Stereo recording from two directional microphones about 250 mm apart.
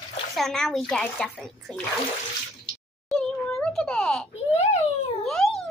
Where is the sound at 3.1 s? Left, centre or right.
Centre.